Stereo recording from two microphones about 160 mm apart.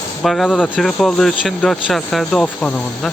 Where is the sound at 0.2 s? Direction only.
Centre (ahead or behind).